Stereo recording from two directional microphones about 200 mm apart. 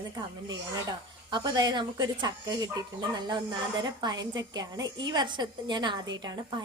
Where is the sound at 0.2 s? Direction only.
20° right (ahead or behind).